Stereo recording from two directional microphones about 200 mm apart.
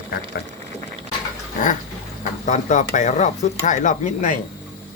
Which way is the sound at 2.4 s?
40° left (ahead or behind).